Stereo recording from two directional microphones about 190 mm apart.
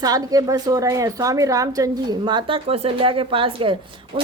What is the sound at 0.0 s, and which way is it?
A woman's voice, 20° right (ahead or behind).